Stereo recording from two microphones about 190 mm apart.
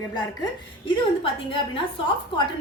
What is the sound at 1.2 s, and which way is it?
Speech, 30° left (ahead or behind).